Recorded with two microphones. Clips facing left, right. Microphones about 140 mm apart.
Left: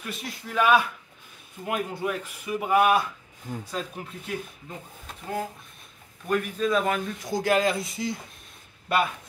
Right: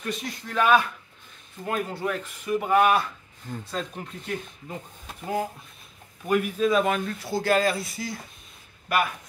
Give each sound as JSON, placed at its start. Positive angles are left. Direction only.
{"t": 0.0, "sound": "speech", "side_deg": 5}
{"t": 6.2, "sound": "speech", "side_deg": -10}
{"t": 7.1, "sound": "speech", "side_deg": 15}